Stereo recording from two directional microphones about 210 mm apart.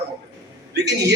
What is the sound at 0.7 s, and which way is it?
Speech, 55° right (ahead or behind).